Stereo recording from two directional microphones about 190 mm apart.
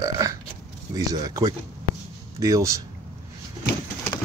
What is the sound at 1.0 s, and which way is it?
Speech, 20° right (ahead or behind).